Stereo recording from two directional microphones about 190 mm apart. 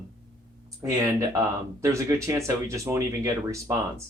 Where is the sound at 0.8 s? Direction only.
15° right (ahead or behind).